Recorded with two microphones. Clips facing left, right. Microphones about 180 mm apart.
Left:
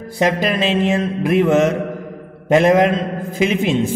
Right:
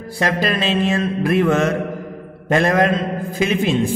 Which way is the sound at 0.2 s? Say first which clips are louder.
Left 3 dB; 20° left (ahead or behind).